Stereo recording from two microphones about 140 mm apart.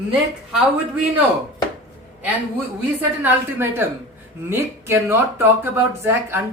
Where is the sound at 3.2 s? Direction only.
15° right (ahead or behind).